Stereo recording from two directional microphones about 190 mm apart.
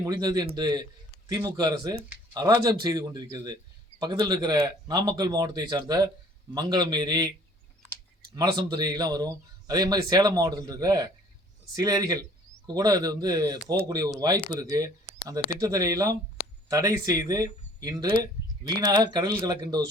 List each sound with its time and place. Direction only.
0.1 s speech: 20° right (ahead or behind)